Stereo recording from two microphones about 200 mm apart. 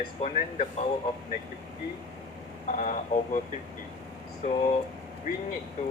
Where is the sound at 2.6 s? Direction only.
40° left (ahead or behind).